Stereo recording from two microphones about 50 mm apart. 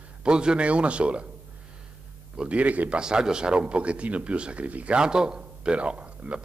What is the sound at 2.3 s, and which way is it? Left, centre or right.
Speech, right.